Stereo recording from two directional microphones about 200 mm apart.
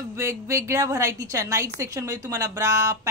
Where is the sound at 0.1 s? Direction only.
15° right (ahead or behind).